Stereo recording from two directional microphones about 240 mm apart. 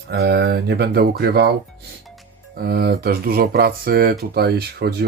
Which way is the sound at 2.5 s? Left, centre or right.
Right.